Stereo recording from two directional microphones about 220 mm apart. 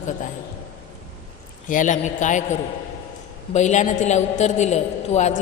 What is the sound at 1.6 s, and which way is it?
A woman's voice, 35° left (ahead or behind).